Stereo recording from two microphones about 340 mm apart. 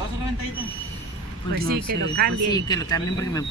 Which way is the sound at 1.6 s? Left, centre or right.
Right.